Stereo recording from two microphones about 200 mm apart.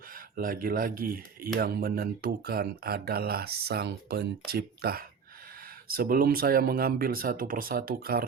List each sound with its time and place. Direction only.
0.1 s speech: 45° right (ahead or behind)